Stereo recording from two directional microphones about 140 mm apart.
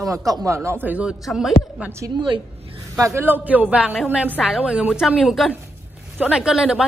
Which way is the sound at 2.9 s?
20° right (ahead or behind).